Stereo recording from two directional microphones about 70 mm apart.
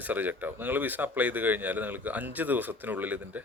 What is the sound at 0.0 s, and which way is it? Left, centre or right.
Speech, right.